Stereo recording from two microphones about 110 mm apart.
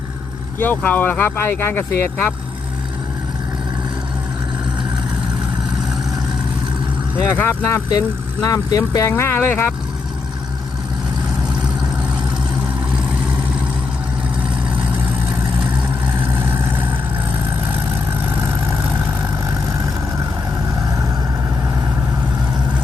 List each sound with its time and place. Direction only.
0.6 s speech: 15° left (ahead or behind)
7.2 s speech: 15° left (ahead or behind)
7.9 s speech: 30° left (ahead or behind)
16.2 s vehicle: 15° right (ahead or behind)